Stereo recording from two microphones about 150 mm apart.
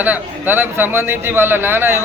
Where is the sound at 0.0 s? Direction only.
10° right (ahead or behind).